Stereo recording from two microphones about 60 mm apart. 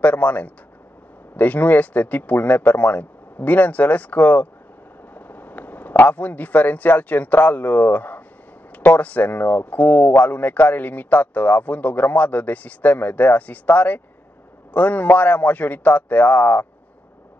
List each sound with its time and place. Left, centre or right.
0.0 s a man's voice: left